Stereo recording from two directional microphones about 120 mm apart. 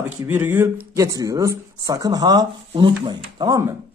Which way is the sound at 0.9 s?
30° right (ahead or behind).